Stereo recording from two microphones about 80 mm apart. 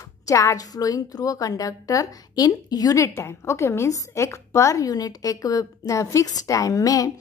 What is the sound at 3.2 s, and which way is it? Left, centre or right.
A woman's voice, left.